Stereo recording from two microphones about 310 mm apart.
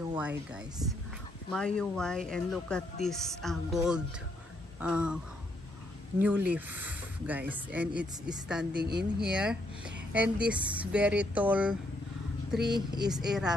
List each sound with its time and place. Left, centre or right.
0.1 s speech: centre
8.7 s speech: right
9.2 s speech: centre
13.0 s speech: centre